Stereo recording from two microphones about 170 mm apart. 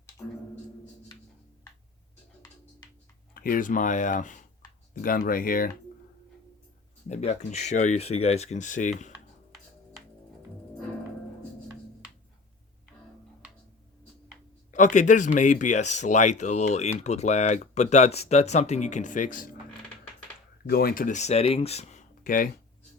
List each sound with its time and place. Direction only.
2.8 s a sound: 25° left (ahead or behind)
3.3 s speech: 55° left (ahead or behind)
7.1 s speech: 40° left (ahead or behind)
14.7 s speech: 45° left (ahead or behind)
20.7 s speech: 60° left (ahead or behind)